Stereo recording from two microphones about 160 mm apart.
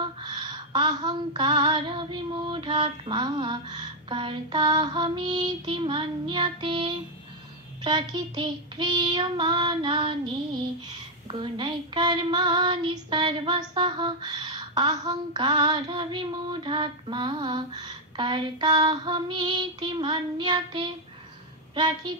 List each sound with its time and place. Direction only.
0.0 s female singing: 30° right (ahead or behind)
7.8 s child singing: 30° right (ahead or behind)
21.7 s female singing: 30° right (ahead or behind)